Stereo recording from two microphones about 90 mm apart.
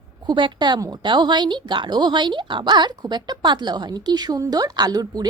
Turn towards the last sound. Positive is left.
turn(degrees=-45)  # may be behind; listen again after turning